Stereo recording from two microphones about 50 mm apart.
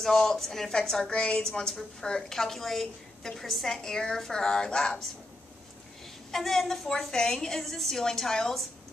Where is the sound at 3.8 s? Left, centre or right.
Centre.